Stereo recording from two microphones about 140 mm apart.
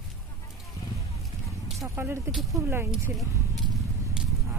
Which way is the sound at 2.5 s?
15° right (ahead or behind).